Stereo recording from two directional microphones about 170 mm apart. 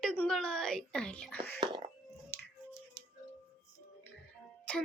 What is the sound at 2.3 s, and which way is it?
Music, 15° left (ahead or behind).